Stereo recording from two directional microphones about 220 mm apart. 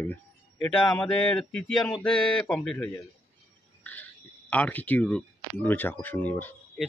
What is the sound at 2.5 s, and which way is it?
A man's voice, centre (ahead or behind).